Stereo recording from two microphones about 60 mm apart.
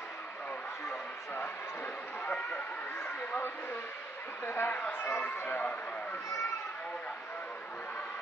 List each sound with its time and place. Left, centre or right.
3.3 s a sound: left
4.5 s speech: left
4.7 s speech: left